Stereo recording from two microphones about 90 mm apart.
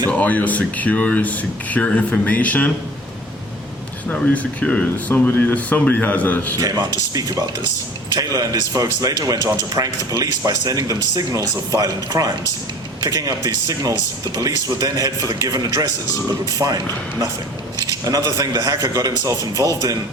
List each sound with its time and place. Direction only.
0.1 s speech: 15° left (ahead or behind)
4.1 s speech: 15° left (ahead or behind)
6.6 s a man's voice: 35° right (ahead or behind)